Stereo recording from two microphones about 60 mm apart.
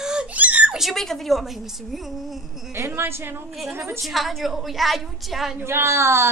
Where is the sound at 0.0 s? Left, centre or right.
Centre.